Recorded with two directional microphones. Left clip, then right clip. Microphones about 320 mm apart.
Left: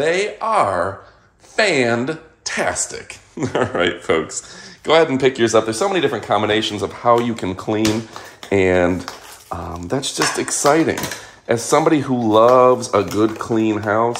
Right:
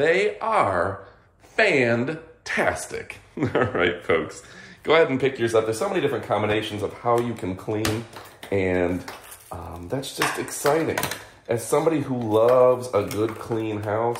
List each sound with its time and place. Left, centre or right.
0.0 s speech: centre; by 14.0 s left